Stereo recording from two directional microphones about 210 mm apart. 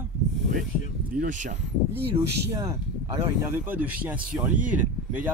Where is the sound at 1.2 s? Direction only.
35° right (ahead or behind).